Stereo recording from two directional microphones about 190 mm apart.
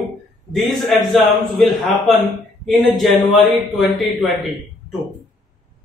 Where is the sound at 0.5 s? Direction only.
Centre (ahead or behind).